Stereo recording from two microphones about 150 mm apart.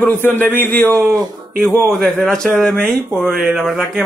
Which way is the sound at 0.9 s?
20° right (ahead or behind).